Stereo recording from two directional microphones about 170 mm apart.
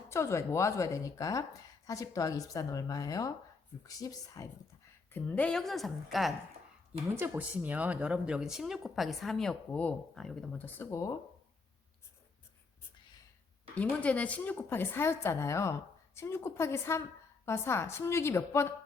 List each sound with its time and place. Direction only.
0.1 s a woman's voice: 15° left (ahead or behind)
5.1 s speech: 5° left (ahead or behind)
13.7 s a woman's voice: 10° left (ahead or behind)